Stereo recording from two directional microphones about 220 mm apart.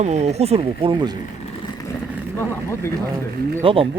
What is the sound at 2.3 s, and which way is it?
Speech, 10° left (ahead or behind).